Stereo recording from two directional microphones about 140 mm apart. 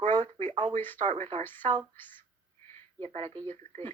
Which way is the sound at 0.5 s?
40° right (ahead or behind).